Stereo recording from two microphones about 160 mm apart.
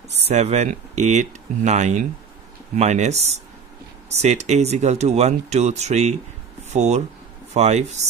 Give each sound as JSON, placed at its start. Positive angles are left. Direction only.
{"t": 0.3, "sound": "speech", "side_deg": -45}